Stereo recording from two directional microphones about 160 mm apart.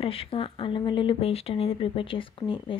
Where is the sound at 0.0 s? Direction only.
35° left (ahead or behind).